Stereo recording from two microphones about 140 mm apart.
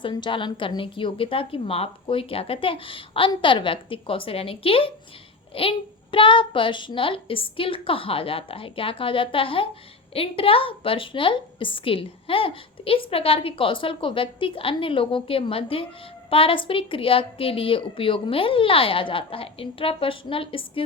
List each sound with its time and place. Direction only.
0.0 s a woman's voice: 35° left (ahead or behind)